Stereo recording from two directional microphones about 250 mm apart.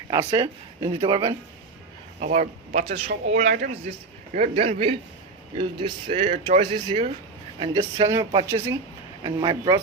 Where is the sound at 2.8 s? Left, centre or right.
Right.